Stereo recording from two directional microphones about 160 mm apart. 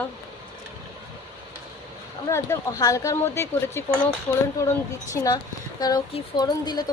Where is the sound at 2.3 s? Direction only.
20° left (ahead or behind).